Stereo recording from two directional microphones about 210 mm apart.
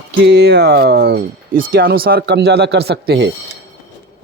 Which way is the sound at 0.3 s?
50° right (ahead or behind).